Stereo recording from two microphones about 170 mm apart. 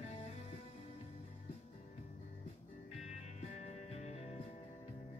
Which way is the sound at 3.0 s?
40° left (ahead or behind).